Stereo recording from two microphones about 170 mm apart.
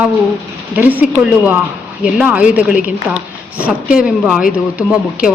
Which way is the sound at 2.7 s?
50° left (ahead or behind).